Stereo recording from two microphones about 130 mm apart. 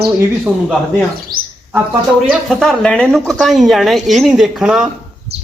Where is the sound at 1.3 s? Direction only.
90° right.